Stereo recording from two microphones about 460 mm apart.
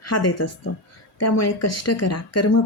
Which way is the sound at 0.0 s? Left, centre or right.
Left.